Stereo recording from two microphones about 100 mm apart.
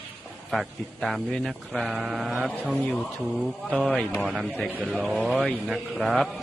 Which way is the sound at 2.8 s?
10° left (ahead or behind).